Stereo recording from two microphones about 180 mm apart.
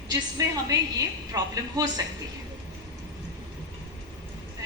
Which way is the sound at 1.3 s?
20° right (ahead or behind).